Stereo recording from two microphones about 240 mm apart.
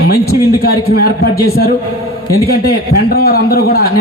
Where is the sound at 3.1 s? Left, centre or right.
Left.